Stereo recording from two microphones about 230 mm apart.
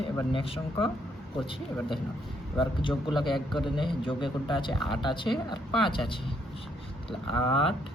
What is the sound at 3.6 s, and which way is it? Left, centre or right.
Speech, left.